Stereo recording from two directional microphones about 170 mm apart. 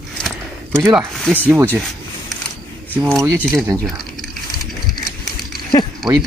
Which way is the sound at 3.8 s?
Centre (ahead or behind).